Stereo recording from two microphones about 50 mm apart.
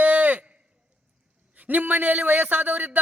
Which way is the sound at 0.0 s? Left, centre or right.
Right.